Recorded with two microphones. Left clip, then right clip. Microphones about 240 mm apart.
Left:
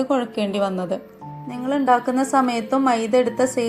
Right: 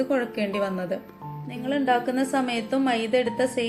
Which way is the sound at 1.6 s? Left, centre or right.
Left.